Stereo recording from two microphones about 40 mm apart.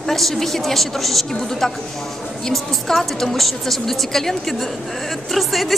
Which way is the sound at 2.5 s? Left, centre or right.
Centre.